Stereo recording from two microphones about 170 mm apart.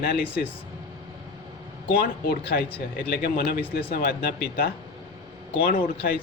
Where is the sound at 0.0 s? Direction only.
65° left (ahead or behind).